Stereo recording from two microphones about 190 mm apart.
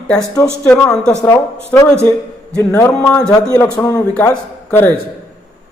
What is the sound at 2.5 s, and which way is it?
A man's voice, 10° left (ahead or behind).